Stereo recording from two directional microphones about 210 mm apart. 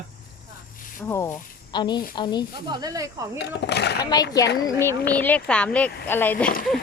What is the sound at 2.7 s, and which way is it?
Speech, 20° right (ahead or behind).